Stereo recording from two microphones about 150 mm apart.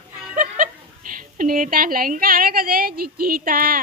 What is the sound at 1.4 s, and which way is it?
A woman's voice, 65° right (ahead or behind).